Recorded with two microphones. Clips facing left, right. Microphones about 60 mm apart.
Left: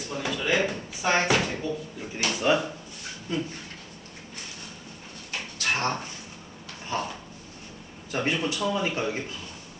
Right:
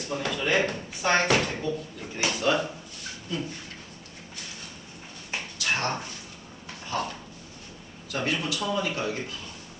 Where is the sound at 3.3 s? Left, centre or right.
Left.